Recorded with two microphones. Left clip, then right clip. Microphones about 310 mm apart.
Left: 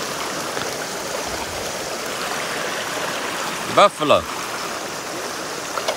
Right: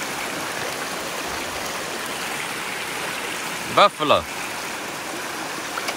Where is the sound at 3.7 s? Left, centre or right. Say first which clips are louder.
Left 2 dB; centre.